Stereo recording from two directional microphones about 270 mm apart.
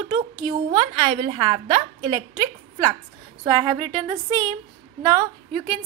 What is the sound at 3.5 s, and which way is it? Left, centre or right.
A woman's voice, centre.